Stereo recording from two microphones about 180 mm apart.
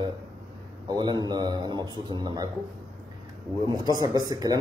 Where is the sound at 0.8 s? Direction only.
25° right (ahead or behind).